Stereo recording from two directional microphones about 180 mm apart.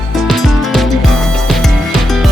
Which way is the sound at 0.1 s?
Centre (ahead or behind).